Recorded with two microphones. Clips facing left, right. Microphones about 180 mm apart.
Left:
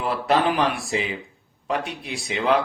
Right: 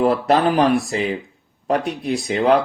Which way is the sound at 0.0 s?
40° right (ahead or behind).